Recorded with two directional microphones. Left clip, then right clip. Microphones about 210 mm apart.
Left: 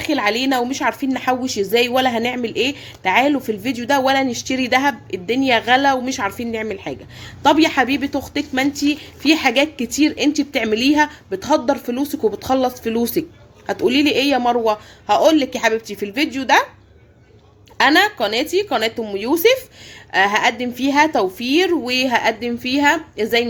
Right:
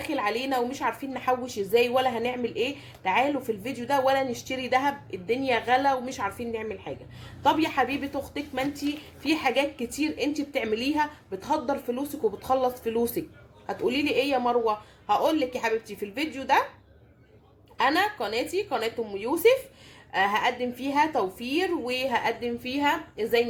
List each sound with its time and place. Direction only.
0.0 s a woman's voice: 45° left (ahead or behind)
17.7 s a woman's voice: 45° left (ahead or behind)